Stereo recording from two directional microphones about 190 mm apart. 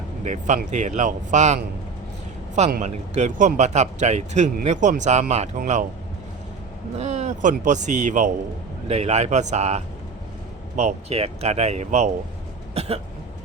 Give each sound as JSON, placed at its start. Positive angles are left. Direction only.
{"t": 0.3, "sound": "speech", "side_deg": -40}
{"t": 2.8, "sound": "speech", "side_deg": -40}
{"t": 7.0, "sound": "speech", "side_deg": -35}